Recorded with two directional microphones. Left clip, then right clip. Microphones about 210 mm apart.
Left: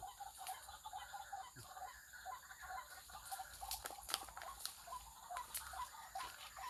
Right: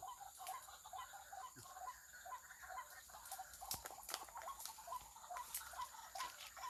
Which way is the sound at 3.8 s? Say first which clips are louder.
Left 4 dB; 35° left (ahead or behind).